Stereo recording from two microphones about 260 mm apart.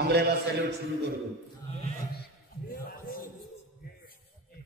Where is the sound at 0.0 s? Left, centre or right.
Right.